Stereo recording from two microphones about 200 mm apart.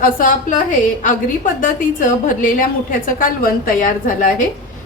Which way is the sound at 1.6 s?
40° left (ahead or behind).